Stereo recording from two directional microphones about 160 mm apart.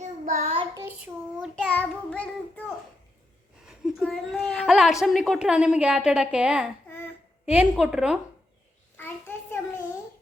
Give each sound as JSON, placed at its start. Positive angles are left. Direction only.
{"t": 0.0, "sound": "child singing", "side_deg": -45}
{"t": 1.4, "sound": "a child's voice", "side_deg": 10}
{"t": 3.7, "sound": "a woman's voice", "side_deg": 0}
{"t": 9.0, "sound": "child singing", "side_deg": 15}